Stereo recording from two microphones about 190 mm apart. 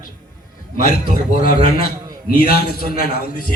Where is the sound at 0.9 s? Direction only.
45° left (ahead or behind).